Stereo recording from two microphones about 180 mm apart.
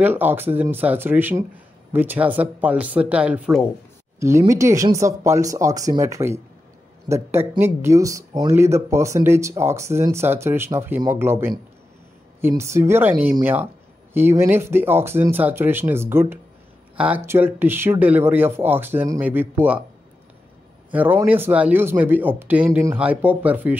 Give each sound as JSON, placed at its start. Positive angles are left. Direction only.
{"t": 0.0, "sound": "speech", "side_deg": -10}
{"t": 4.2, "sound": "speech", "side_deg": -15}
{"t": 20.9, "sound": "speech", "side_deg": -10}